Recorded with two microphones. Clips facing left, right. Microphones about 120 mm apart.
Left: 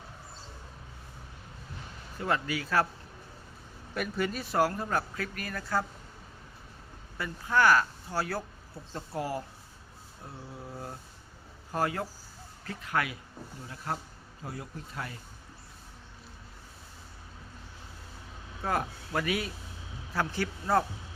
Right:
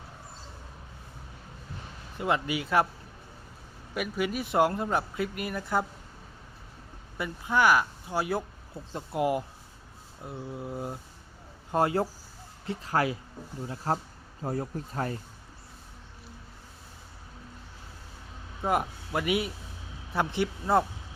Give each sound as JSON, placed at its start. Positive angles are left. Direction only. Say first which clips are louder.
{"t": 2.1, "sound": "speech", "louder": "right 2 dB", "side_deg": -20}
{"t": 3.9, "sound": "speech", "louder": "right 2 dB", "side_deg": -10}
{"t": 7.2, "sound": "speech", "louder": "right 1 dB", "side_deg": -15}
{"t": 18.6, "sound": "speech", "louder": "right 3 dB", "side_deg": -20}